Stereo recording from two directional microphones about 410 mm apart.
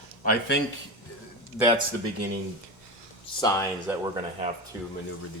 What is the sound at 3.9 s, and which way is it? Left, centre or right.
Speech, centre.